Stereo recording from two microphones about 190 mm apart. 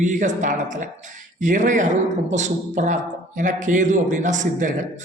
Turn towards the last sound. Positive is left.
turn(degrees=-40)  # may be behind; listen again after turning